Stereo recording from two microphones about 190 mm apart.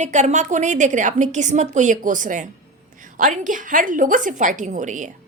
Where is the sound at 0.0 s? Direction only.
40° right (ahead or behind).